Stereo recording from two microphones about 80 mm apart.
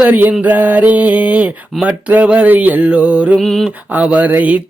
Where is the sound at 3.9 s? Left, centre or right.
Centre.